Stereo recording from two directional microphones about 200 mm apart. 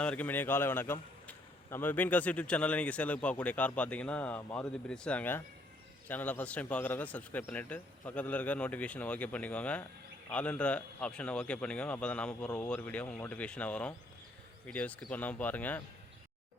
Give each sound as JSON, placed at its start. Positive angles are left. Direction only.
{"t": 0.0, "sound": "a man's voice", "side_deg": 5}